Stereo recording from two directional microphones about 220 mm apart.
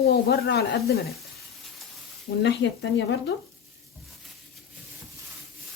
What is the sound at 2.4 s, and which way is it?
Speech, 50° left (ahead or behind).